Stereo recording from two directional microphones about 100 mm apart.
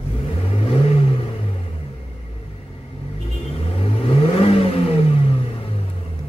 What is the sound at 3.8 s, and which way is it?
Vehicle, 65° left (ahead or behind).